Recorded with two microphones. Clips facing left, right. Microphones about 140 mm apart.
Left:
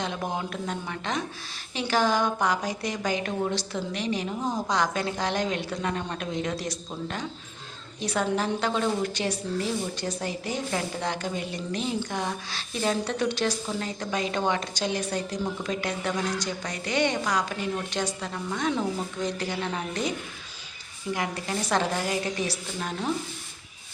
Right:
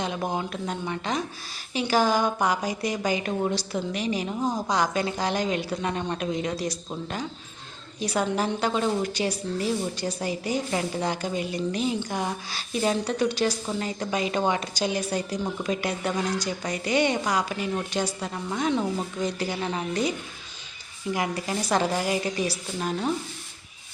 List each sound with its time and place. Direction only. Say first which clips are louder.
0.0 s a woman's voice: right 2 dB; 5° right (ahead or behind)